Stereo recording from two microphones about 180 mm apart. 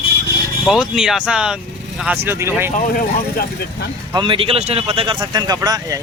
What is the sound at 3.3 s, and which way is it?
Speech, 65° left (ahead or behind).